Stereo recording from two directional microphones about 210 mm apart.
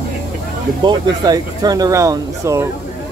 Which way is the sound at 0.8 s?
20° right (ahead or behind).